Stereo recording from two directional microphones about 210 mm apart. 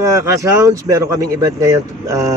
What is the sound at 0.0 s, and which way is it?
Speech, 15° right (ahead or behind).